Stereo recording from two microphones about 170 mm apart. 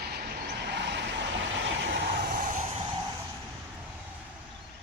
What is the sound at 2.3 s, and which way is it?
Vehicle, 50° right (ahead or behind).